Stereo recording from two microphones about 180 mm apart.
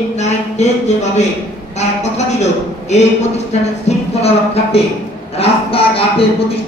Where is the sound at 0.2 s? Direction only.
40° left (ahead or behind).